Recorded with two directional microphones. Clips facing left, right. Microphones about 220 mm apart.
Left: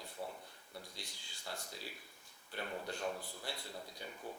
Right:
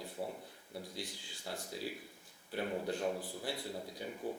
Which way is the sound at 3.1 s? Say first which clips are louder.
Right 6 dB; 30° right (ahead or behind).